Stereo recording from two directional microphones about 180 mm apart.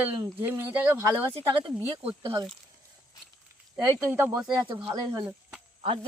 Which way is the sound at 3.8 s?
10° right (ahead or behind).